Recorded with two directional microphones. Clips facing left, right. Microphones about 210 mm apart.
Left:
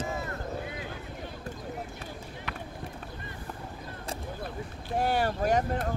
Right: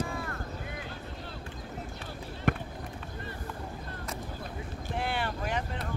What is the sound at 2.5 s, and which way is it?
Basketball bounce, 50° right (ahead or behind).